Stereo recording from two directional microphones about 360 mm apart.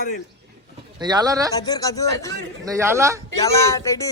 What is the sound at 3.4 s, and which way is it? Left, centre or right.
Speech, centre.